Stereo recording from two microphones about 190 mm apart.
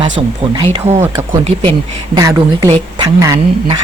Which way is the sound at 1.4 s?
30° right (ahead or behind).